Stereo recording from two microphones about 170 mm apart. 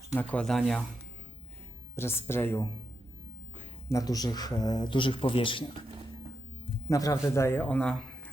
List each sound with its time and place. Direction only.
0.1 s speech: 10° left (ahead or behind)
2.0 s a man's voice: 15° left (ahead or behind)
3.8 s a man's voice: 20° left (ahead or behind)
6.8 s a man's voice: 20° left (ahead or behind)